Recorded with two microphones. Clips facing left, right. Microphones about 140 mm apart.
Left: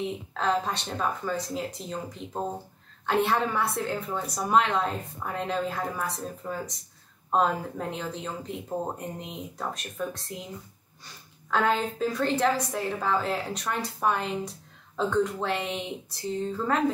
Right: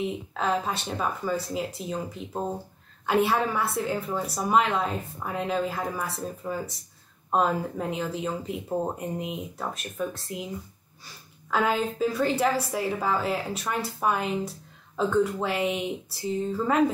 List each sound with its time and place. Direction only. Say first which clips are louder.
0.0 s a woman's voice: right 1 dB; 5° right (ahead or behind)
11.5 s a woman's voice: even; 5° right (ahead or behind)